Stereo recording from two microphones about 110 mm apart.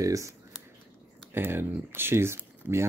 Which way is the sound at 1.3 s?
20° right (ahead or behind).